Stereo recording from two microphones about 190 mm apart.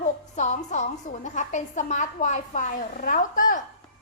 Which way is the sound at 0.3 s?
40° left (ahead or behind).